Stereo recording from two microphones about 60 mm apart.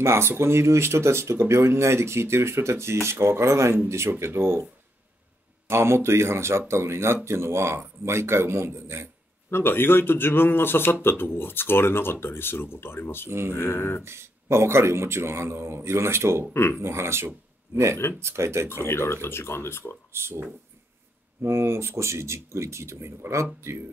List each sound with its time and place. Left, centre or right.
0.0 s speech: right
5.7 s speech: right
9.5 s speech: left
14.0 s speech: right
18.7 s speech: left
20.1 s speech: right